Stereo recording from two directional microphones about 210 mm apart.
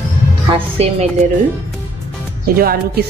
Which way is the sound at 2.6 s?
45° right (ahead or behind).